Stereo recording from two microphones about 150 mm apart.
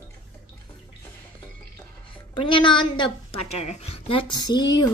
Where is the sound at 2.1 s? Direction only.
35° left (ahead or behind).